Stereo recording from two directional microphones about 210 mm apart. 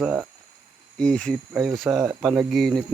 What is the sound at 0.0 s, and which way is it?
Speech, 5° right (ahead or behind).